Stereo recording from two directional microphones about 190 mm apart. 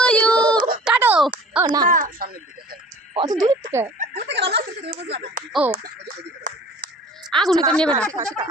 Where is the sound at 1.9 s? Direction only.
45° right (ahead or behind).